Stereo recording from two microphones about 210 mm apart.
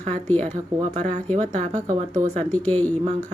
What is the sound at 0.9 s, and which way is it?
Speech, 35° right (ahead or behind).